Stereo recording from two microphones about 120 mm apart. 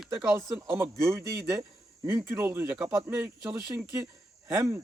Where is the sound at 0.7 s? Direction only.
25° right (ahead or behind).